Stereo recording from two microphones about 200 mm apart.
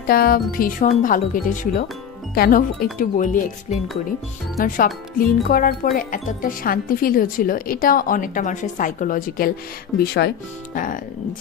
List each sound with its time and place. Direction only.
0.0 s speech: 45° left (ahead or behind)
4.7 s speech: 45° left (ahead or behind)
9.9 s speech: 50° left (ahead or behind)